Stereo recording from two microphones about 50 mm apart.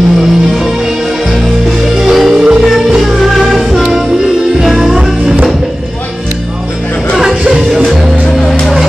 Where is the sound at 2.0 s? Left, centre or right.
Centre.